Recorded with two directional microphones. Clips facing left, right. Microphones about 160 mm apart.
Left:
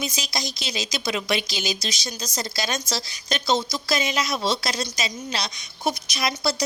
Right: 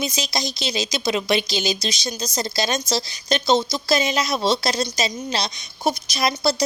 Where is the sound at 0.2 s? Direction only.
25° right (ahead or behind).